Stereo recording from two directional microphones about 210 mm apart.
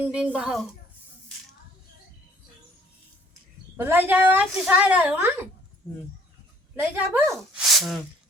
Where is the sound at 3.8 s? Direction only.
10° right (ahead or behind).